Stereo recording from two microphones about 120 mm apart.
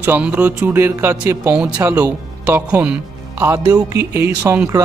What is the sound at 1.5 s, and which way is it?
Speech, 10° right (ahead or behind).